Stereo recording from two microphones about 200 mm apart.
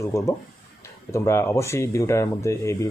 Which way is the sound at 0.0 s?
15° left (ahead or behind).